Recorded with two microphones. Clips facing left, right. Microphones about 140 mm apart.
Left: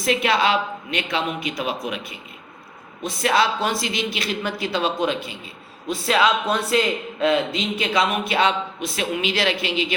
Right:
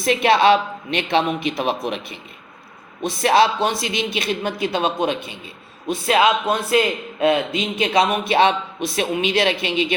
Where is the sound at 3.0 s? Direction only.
25° right (ahead or behind).